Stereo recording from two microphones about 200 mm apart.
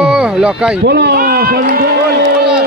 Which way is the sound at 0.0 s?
5° right (ahead or behind).